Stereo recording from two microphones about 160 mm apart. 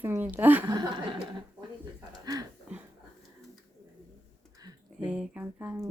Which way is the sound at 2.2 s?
25° right (ahead or behind).